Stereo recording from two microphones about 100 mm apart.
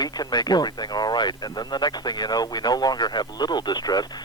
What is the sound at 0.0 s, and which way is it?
Speech, 40° left (ahead or behind).